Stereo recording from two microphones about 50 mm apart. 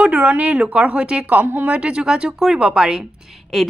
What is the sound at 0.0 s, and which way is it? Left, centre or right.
A woman's voice, right.